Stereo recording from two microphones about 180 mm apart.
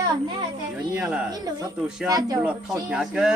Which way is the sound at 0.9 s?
5° right (ahead or behind).